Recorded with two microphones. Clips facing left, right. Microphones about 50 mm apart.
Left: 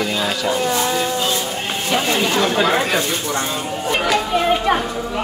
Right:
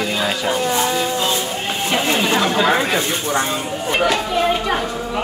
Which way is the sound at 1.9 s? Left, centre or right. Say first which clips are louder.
Even; centre.